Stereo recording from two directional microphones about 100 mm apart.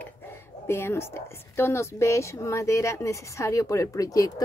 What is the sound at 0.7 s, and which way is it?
A woman's voice, 25° left (ahead or behind).